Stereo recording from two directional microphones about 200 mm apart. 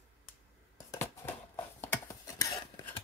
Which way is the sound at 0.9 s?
10° left (ahead or behind).